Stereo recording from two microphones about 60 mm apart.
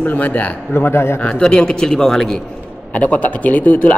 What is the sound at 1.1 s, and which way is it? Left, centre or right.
A man's voice, left.